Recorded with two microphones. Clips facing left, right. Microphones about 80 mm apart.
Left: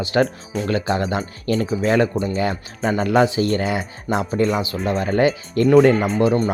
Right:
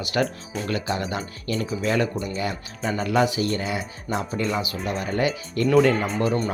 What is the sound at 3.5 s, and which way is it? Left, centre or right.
Speech, left.